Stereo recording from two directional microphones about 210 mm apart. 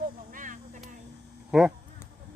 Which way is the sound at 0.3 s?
40° right (ahead or behind).